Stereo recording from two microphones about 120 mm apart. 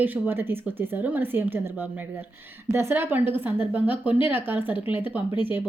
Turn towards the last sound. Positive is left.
turn(degrees=-15)  # may be behind; listen again after turning